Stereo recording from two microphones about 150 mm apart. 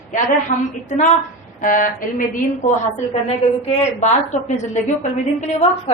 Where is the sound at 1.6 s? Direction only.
65° left (ahead or behind).